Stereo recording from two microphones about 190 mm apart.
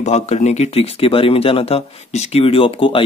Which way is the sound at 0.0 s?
35° left (ahead or behind).